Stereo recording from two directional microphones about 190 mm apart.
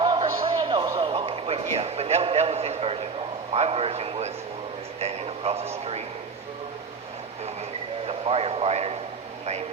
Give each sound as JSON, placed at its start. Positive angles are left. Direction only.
{"t": 0.2, "sound": "a sound", "side_deg": -25}
{"t": 3.5, "sound": "speech", "side_deg": -30}
{"t": 8.0, "sound": "a man's voice", "side_deg": -30}